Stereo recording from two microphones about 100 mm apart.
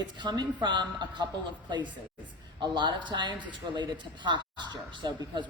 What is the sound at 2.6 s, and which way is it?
A man's voice, 50° right (ahead or behind).